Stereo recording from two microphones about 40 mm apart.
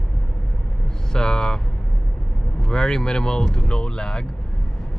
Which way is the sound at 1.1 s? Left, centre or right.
Centre.